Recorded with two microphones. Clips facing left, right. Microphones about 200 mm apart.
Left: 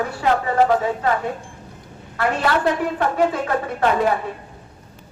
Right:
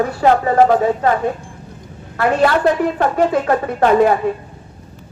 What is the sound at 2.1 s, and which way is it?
A woman's voice, 45° right (ahead or behind).